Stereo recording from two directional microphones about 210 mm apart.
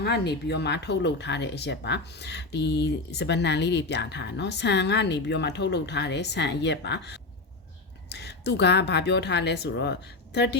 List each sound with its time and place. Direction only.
0.0 s speech: 50° left (ahead or behind)